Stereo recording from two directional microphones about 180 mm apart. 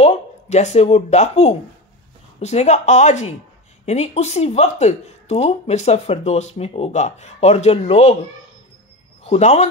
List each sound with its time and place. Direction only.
0.0 s speech: 40° left (ahead or behind)
9.2 s speech: 35° left (ahead or behind)